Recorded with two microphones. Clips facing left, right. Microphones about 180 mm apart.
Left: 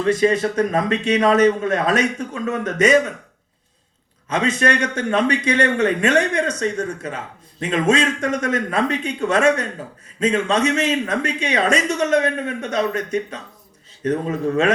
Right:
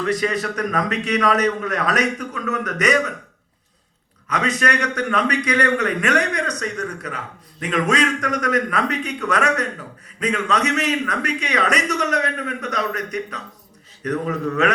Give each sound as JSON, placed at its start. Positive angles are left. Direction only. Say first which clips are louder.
{"t": 0.0, "sound": "a man's voice", "louder": "left 5 dB", "side_deg": 25}
{"t": 4.3, "sound": "a man's voice", "louder": "left 3 dB", "side_deg": 25}